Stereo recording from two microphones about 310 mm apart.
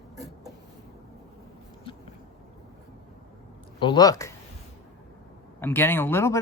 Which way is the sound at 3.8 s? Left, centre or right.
Centre.